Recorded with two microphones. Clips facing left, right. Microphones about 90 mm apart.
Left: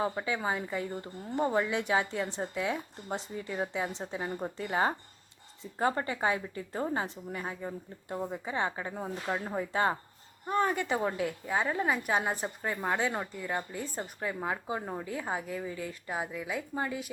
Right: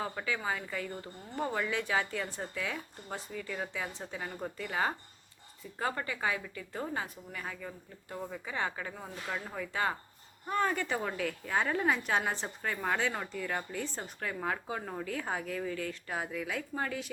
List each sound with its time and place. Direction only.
0.0 s speech: 25° left (ahead or behind)
10.4 s speech: 20° left (ahead or behind)
11.5 s a woman's voice: 5° left (ahead or behind)